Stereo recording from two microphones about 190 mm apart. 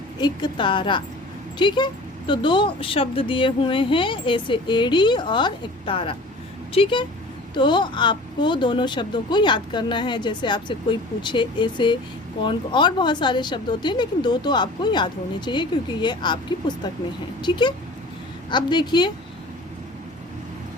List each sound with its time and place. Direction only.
0.2 s speech: 20° left (ahead or behind)